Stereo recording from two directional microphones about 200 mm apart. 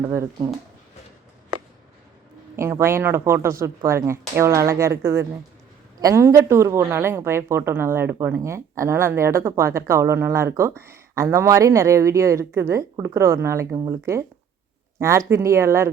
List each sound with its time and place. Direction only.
0.1 s a woman's voice: 15° right (ahead or behind)
2.6 s a woman's voice: 15° right (ahead or behind)